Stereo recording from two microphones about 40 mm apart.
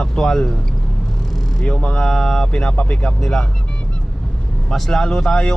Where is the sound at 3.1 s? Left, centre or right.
Centre.